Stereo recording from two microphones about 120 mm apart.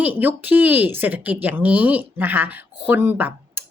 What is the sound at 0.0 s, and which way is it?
Speech, 15° right (ahead or behind).